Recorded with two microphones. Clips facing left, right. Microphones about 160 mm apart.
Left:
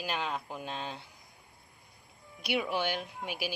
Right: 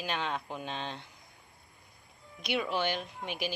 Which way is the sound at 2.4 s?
10° left (ahead or behind).